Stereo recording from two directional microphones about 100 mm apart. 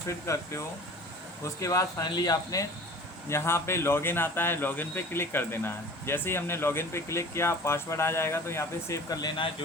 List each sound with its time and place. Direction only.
0.1 s speech: 30° left (ahead or behind)
1.6 s speech: 35° left (ahead or behind)
3.2 s speech: 25° left (ahead or behind)
9.0 s speech: 40° left (ahead or behind)